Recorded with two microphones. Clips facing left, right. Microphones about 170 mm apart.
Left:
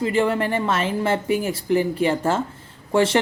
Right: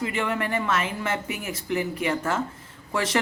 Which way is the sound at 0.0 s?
30° left (ahead or behind).